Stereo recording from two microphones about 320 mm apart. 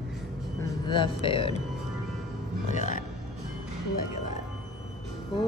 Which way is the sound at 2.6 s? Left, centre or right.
Left.